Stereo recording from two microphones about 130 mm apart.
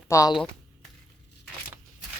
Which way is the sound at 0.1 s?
25° left (ahead or behind).